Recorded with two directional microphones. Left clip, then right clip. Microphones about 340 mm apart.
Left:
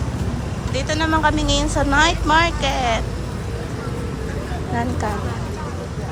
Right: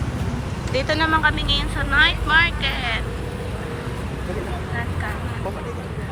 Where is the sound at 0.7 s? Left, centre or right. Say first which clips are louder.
Right 1 dB; centre.